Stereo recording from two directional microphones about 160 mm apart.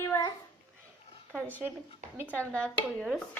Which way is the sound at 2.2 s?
10° left (ahead or behind).